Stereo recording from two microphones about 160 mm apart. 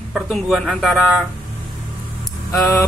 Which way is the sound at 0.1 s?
Centre (ahead or behind).